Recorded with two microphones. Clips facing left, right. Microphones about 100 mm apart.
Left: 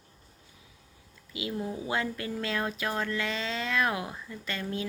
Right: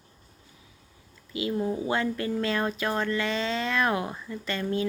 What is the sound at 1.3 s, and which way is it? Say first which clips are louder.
Speech: right 6 dB; 5° left (ahead or behind).